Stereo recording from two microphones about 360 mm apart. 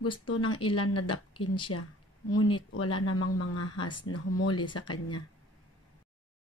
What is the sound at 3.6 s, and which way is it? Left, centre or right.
Speech, centre.